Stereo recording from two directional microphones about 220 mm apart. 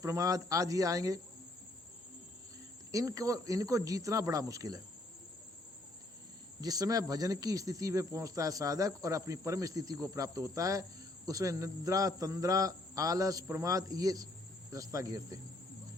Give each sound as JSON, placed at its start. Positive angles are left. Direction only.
{"t": 0.0, "sound": "speech", "side_deg": -15}
{"t": 2.9, "sound": "speech", "side_deg": -15}
{"t": 6.6, "sound": "speech", "side_deg": -15}